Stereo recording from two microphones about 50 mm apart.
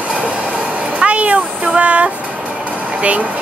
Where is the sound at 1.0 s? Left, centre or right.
Right.